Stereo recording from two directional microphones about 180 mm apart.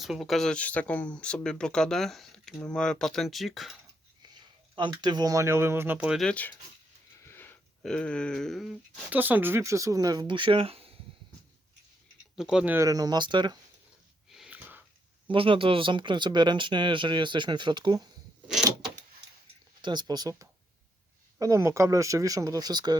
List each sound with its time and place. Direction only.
0.0 s speech: centre (ahead or behind)
4.9 s speech: 25° right (ahead or behind); by 6.5 s 5° left (ahead or behind)
7.3 s a sound: 10° left (ahead or behind)
9.1 s speech: 10° right (ahead or behind); by 10.9 s 30° right (ahead or behind)
12.4 s speech: 5° right (ahead or behind); by 13.6 s 25° right (ahead or behind)
14.3 s a sound: 5° right (ahead or behind)
15.3 s speech: 30° right (ahead or behind)
19.8 s speech: 25° right (ahead or behind)